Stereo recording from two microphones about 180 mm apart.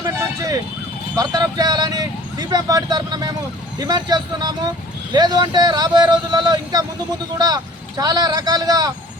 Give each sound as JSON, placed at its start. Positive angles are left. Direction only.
{"t": 0.0, "sound": "vehicle", "side_deg": -20}
{"t": 1.1, "sound": "speech", "side_deg": -20}